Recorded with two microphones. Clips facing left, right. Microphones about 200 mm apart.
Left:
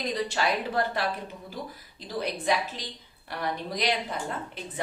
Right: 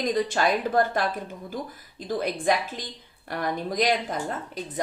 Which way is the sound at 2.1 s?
50° right (ahead or behind).